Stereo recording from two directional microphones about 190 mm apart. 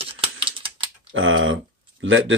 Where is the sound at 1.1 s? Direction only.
90° right.